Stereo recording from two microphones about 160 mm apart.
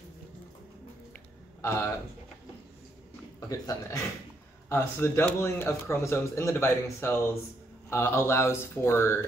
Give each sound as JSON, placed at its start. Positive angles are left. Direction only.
{"t": 1.6, "sound": "a man's voice", "side_deg": 15}
{"t": 3.3, "sound": "speech", "side_deg": 20}